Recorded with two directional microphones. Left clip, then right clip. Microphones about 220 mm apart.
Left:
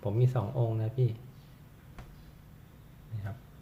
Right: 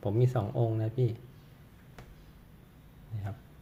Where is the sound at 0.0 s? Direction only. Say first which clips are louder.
Right 2 dB; 20° right (ahead or behind).